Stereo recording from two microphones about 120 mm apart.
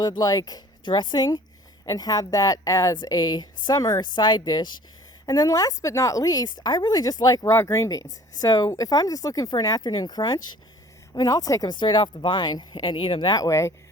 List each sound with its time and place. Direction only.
0.0 s a woman's voice: 30° left (ahead or behind)